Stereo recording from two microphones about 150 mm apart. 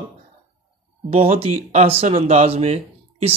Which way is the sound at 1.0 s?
40° right (ahead or behind).